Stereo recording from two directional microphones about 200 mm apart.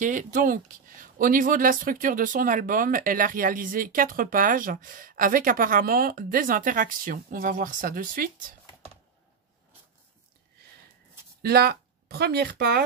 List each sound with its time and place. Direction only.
0.0 s speech: 40° right (ahead or behind)
11.4 s speech: 50° right (ahead or behind)